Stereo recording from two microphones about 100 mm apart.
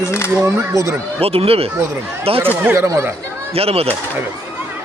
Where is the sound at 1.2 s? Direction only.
75° right (ahead or behind).